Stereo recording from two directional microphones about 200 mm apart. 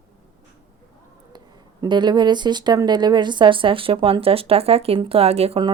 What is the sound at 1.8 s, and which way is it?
Speech, 20° right (ahead or behind).